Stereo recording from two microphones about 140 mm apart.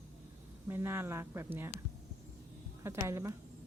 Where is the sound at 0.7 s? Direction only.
15° right (ahead or behind).